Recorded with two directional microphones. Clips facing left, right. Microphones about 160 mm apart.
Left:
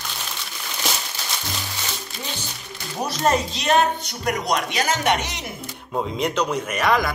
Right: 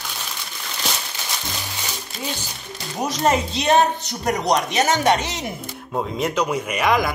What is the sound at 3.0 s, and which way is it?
Speech, 15° right (ahead or behind).